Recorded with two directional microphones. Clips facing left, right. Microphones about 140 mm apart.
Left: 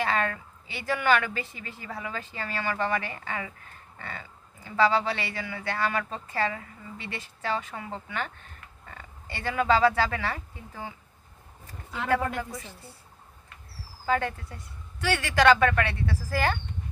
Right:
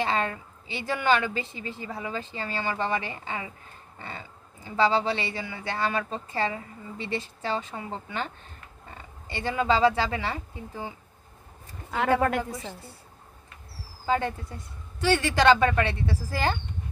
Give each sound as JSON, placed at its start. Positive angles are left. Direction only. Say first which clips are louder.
{"t": 0.0, "sound": "speech", "louder": "even", "side_deg": -25}
{"t": 12.2, "sound": "a woman's voice", "louder": "right 5 dB", "side_deg": -70}
{"t": 14.0, "sound": "speech", "louder": "right 1 dB", "side_deg": -25}